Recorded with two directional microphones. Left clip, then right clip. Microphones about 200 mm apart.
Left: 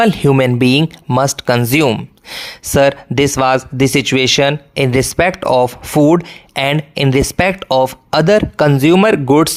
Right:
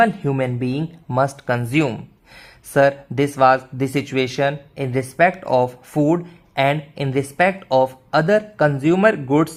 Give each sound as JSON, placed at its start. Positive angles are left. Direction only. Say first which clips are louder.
{"t": 0.0, "sound": "speech", "louder": "left 6 dB", "side_deg": 35}